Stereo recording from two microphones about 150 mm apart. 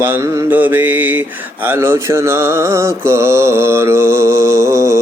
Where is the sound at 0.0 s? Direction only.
15° right (ahead or behind).